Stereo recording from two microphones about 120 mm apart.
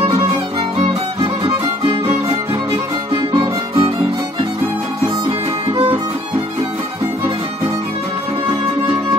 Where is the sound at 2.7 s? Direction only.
40° right (ahead or behind).